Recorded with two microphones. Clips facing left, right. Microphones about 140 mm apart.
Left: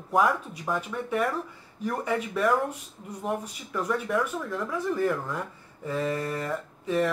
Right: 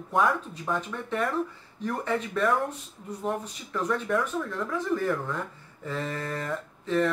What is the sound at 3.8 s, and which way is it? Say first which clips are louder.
Speech: even; 10° left (ahead or behind).